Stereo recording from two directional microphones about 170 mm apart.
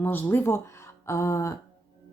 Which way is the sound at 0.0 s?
10° left (ahead or behind).